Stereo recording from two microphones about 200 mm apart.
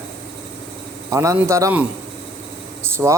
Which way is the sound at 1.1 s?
15° right (ahead or behind).